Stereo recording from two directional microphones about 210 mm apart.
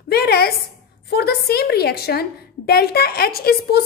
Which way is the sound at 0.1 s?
45° left (ahead or behind).